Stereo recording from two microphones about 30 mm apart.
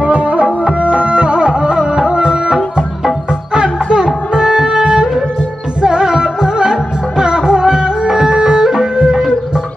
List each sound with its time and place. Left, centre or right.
0.0 s tabla: right
1.5 s music: right